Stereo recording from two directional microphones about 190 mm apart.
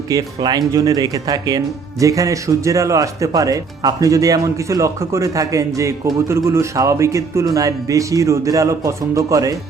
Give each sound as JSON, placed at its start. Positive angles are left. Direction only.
{"t": 0.1, "sound": "speech", "side_deg": -20}